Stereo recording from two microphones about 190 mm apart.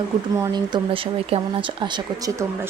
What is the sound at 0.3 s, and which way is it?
Speech, 20° right (ahead or behind).